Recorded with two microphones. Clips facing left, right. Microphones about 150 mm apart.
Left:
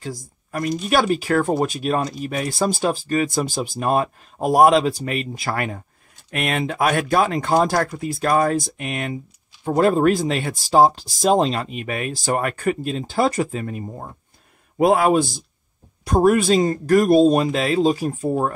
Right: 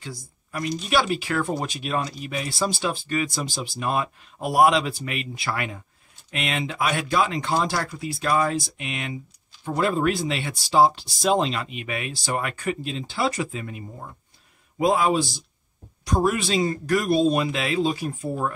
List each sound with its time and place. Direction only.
0.0 s speech: 45° left (ahead or behind)
14.8 s speech: 60° left (ahead or behind); by 18.5 s 40° left (ahead or behind)